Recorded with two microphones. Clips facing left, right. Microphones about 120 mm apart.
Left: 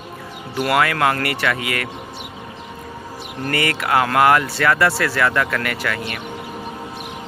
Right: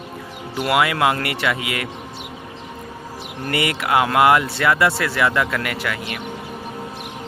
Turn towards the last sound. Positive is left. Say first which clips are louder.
# left 1 dB
turn(degrees=-15)  # may be behind; listen again after turning